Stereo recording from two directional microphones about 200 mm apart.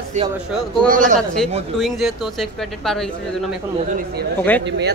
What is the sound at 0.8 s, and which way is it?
Speech, 40° right (ahead or behind).